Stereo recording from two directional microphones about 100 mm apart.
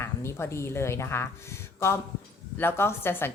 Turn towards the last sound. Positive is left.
turn(degrees=20)  # may be behind; listen again after turning